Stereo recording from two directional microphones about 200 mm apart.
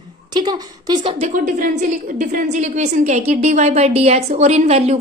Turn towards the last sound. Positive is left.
turn(degrees=-30)  # may be behind; listen again after turning